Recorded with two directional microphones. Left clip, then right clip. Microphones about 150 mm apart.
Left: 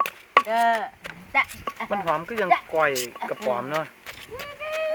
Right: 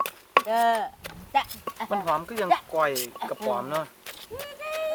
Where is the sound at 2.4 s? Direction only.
20° left (ahead or behind).